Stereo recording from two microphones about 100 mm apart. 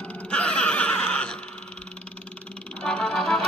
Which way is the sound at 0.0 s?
10° left (ahead or behind).